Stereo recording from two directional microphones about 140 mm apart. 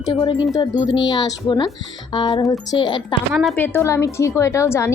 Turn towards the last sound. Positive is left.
turn(degrees=20)  # may be behind; listen again after turning